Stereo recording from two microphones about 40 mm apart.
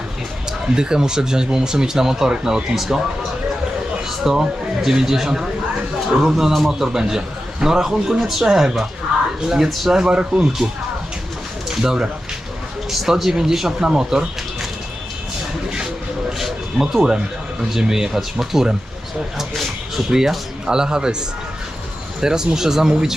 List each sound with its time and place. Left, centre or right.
0.8 s speech: centre
4.2 s speech: centre
10.0 s speech: right
11.8 s speech: centre
12.9 s speech: centre
16.4 s a sound: centre
17.7 s speech: centre
20.1 s speech: centre